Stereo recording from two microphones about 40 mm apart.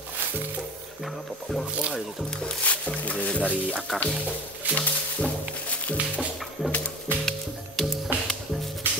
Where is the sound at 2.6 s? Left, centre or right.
Left.